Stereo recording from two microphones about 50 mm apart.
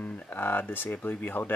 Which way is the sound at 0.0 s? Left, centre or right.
Left.